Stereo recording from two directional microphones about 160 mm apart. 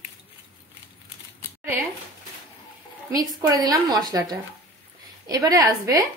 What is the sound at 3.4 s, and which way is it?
A woman's voice, 25° right (ahead or behind).